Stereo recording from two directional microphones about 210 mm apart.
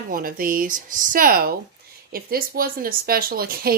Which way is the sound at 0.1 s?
45° right (ahead or behind).